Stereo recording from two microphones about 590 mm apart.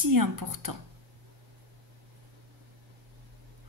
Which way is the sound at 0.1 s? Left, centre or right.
Right.